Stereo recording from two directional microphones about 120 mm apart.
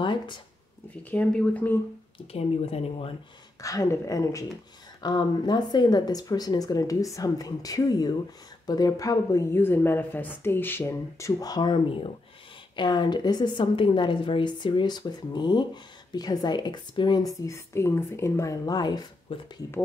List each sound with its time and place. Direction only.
0.0 s speech: 40° left (ahead or behind)
1.1 s speech: 10° left (ahead or behind)
2.3 s speech: 55° left (ahead or behind)
3.6 s a woman's voice: 30° left (ahead or behind)
19.3 s speech: 50° left (ahead or behind)